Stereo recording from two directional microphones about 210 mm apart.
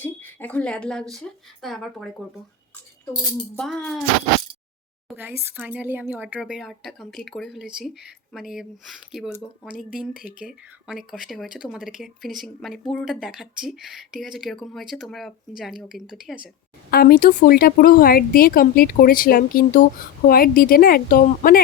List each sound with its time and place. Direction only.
0.0 s speech: 10° left (ahead or behind)
5.0 s a sound: 10° right (ahead or behind)
5.5 s speech: 5° right (ahead or behind)
16.9 s a woman's voice: 45° left (ahead or behind)